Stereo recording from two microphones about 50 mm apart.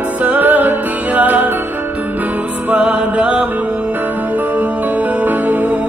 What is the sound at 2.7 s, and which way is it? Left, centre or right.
Music, right.